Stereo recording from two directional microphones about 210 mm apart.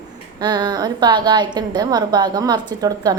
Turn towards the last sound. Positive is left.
turn(degrees=-15)  # may be behind; listen again after turning